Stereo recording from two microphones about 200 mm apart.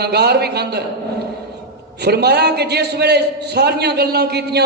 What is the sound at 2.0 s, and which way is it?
A man's voice, 55° right (ahead or behind).